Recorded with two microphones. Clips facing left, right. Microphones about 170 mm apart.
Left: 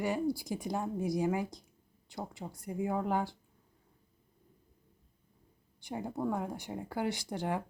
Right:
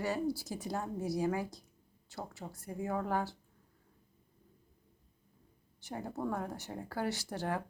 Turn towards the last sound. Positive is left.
turn(degrees=15)  # may be behind; listen again after turning